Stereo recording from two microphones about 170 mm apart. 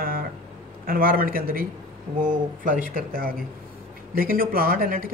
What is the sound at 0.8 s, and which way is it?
Speech, 55° right (ahead or behind).